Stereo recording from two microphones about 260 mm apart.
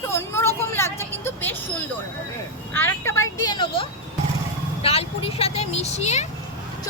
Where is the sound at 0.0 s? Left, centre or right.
Centre.